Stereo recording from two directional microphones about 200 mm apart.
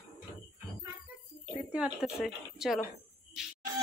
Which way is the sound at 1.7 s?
5° right (ahead or behind).